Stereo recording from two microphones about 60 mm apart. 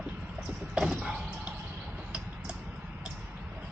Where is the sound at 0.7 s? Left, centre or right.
Centre.